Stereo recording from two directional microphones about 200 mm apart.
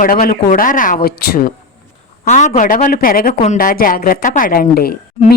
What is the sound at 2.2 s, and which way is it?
Speech, 40° left (ahead or behind).